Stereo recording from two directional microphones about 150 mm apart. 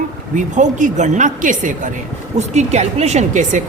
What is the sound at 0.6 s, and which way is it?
A woman's voice, 55° right (ahead or behind).